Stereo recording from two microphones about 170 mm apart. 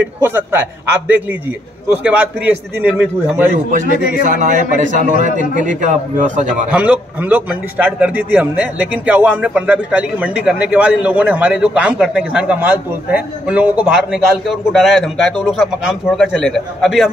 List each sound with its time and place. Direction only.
0.2 s a man's voice: 10° right (ahead or behind)
4.3 s a man's voice: 50° right (ahead or behind)
6.7 s a man's voice: 10° right (ahead or behind)